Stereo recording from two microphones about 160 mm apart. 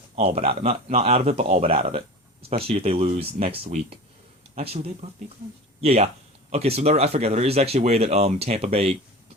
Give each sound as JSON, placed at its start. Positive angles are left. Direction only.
{"t": 0.2, "sound": "speech", "side_deg": -40}